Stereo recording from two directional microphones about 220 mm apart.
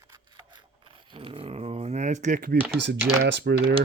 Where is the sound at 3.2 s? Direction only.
50° right (ahead or behind).